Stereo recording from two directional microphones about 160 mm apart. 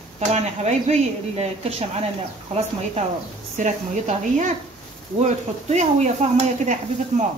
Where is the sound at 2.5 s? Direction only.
45° right (ahead or behind).